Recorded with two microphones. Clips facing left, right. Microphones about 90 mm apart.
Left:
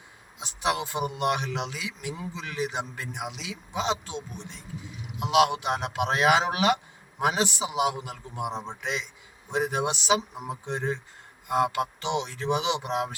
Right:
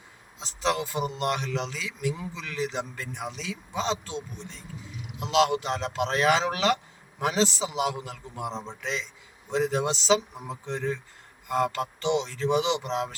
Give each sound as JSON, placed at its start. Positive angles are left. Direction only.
{"t": 0.3, "sound": "a man's voice", "side_deg": 15}
{"t": 11.4, "sound": "music", "side_deg": 15}
{"t": 12.1, "sound": "a man's voice", "side_deg": 15}